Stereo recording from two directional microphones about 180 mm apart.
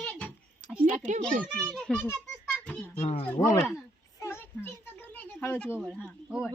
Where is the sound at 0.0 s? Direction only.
5° left (ahead or behind).